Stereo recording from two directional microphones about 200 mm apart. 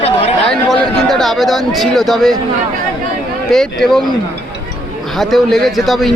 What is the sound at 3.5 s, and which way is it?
Speech, centre (ahead or behind).